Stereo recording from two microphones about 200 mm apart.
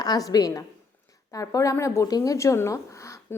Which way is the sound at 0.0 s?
20° left (ahead or behind).